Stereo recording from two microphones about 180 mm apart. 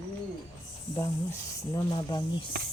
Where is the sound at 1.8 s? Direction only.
25° left (ahead or behind).